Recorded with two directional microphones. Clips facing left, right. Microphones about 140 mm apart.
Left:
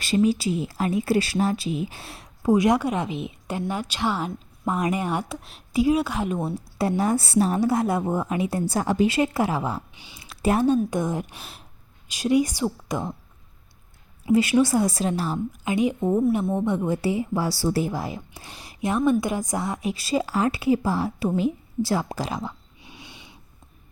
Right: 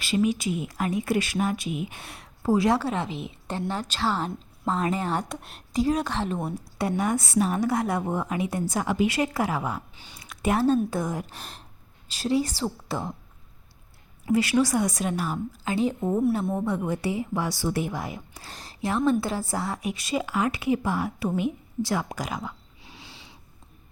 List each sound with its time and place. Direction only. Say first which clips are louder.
0.0 s speech: left 3 dB; 35° left (ahead or behind); by 6.4 s 10° left (ahead or behind)
6.7 s speech: left 3 dB; 30° left (ahead or behind)
9.1 s a woman's voice: left 3 dB; 25° left (ahead or behind)
9.9 s speech: left 1 dB; 10° left (ahead or behind)
10.2 s a sound: left 3 dB; 30° left (ahead or behind)
10.9 s a woman's voice: left 3 dB; 25° left (ahead or behind)
11.3 s speech: even; 10° left (ahead or behind)
14.3 s a woman's voice: left 3 dB; 20° left (ahead or behind)
15.5 s speech: left 2 dB; 15° left (ahead or behind)
16.4 s a woman's voice: left 3 dB; centre (ahead or behind)
16.9 s a woman's voice: left 3 dB; 25° left (ahead or behind)
18.5 s a woman's voice: left 2 dB; 10° left (ahead or behind); by 22.4 s 30° left (ahead or behind)
22.8 s a sound: left 2 dB; 20° left (ahead or behind)